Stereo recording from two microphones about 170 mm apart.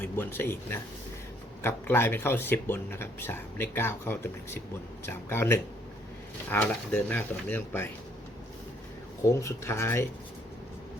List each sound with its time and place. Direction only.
0.0 s speech: 10° left (ahead or behind)
9.2 s speech: 15° left (ahead or behind)